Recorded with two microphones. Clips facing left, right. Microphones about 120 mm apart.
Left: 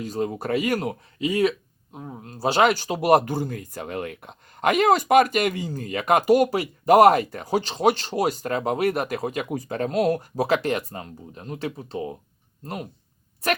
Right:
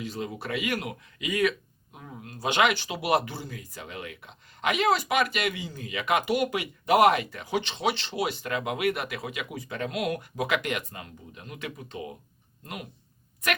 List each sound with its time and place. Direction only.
0.0 s speech: 40° left (ahead or behind)